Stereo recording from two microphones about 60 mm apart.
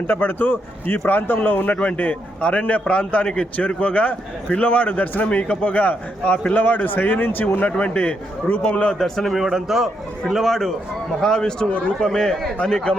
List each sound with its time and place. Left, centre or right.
0.1 s a man's voice: left
9.0 s a man's voice: centre
9.4 s a man's voice: centre